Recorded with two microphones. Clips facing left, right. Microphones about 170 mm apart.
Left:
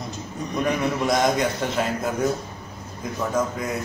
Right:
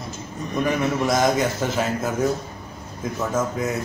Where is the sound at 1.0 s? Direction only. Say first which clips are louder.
Right 1 dB; centre (ahead or behind).